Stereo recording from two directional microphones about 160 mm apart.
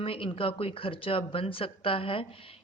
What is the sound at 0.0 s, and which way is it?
Speech, 35° left (ahead or behind).